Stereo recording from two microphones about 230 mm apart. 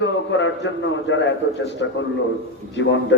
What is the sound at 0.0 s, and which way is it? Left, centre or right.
A man's voice, left.